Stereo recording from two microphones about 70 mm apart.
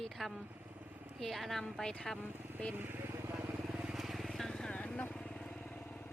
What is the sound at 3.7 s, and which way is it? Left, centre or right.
Vehicle, centre.